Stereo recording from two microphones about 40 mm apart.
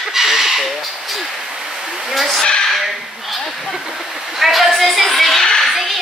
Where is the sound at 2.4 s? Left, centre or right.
Left.